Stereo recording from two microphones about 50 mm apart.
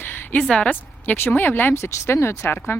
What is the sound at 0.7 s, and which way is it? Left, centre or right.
Speech, left.